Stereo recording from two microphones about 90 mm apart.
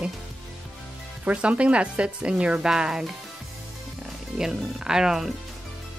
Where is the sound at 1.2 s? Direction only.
15° right (ahead or behind).